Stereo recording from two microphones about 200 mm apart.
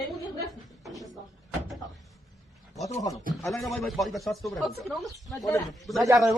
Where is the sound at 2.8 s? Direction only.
15° left (ahead or behind).